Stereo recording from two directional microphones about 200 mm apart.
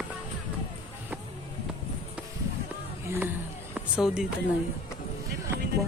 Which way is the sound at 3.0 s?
15° right (ahead or behind).